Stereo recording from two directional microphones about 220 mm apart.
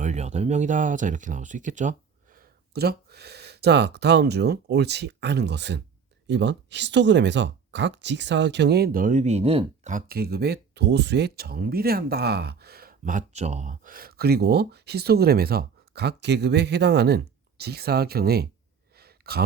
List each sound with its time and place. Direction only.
0.0 s speech: 30° right (ahead or behind)
18.9 s sigh: 45° right (ahead or behind)